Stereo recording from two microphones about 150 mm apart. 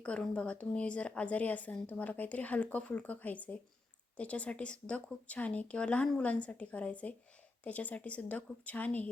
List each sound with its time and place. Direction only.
0.0 s a woman's voice: 5° left (ahead or behind)